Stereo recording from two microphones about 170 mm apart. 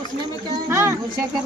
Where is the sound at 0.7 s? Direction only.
15° right (ahead or behind).